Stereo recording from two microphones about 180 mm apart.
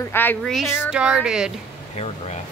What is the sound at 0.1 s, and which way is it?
Speech, 10° left (ahead or behind).